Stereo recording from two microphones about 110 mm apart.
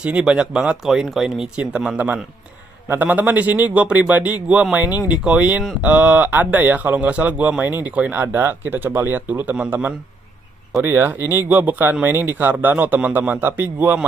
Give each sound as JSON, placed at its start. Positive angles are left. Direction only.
{"t": 0.0, "sound": "speech", "side_deg": -10}